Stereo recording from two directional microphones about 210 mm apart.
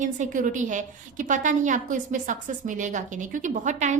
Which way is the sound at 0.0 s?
35° right (ahead or behind).